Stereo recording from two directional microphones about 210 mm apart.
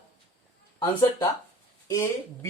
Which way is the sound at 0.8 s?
20° left (ahead or behind).